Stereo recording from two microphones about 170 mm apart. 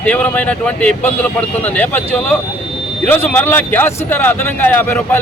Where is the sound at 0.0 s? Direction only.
10° left (ahead or behind).